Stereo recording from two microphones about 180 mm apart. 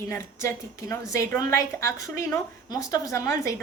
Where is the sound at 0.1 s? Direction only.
15° left (ahead or behind).